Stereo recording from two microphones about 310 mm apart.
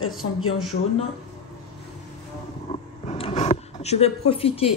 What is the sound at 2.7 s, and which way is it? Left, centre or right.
Vehicle, centre.